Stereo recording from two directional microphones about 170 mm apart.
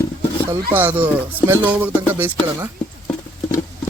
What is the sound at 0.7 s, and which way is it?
Speech, 10° right (ahead or behind).